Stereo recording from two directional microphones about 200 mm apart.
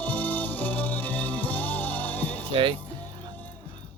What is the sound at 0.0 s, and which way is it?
Music, 10° left (ahead or behind).